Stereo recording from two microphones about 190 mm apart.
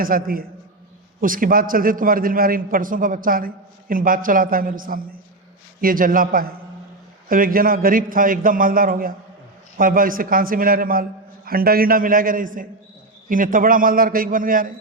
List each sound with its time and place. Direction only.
0.0 s a man's voice: 50° right (ahead or behind)